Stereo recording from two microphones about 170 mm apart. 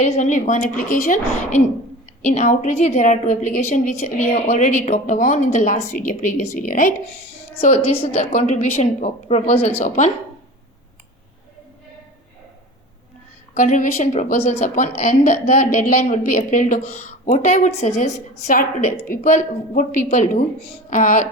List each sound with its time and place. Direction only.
0.0 s a woman's voice: 45° left (ahead or behind)
4.9 s a woman's voice: 50° left (ahead or behind)
7.7 s a woman's voice: 35° left (ahead or behind)
13.5 s a woman's voice: 50° left (ahead or behind)